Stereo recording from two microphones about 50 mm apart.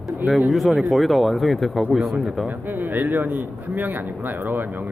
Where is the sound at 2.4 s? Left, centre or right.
Right.